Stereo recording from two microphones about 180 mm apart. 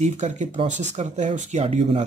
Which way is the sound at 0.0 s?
40° right (ahead or behind).